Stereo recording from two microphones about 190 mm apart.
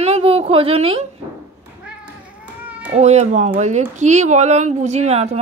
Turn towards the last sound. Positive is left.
turn(degrees=-35)  # may be behind; listen again after turning